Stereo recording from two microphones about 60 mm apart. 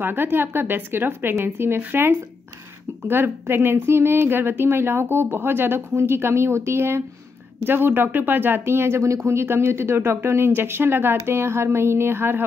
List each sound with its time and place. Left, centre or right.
0.0 s a woman's voice: right
9.0 s speech: right